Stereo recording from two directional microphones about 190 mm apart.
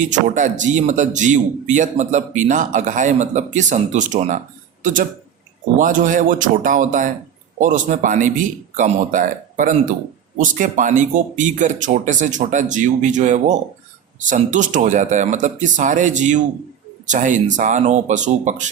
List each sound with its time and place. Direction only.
0.0 s a man's voice: 40° right (ahead or behind)